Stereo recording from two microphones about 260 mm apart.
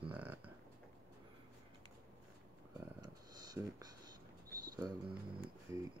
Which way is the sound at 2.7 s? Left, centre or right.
Centre.